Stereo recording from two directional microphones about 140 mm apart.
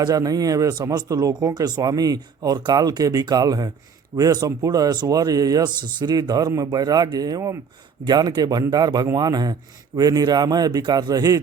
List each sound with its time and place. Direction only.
0.0 s speech: 25° right (ahead or behind)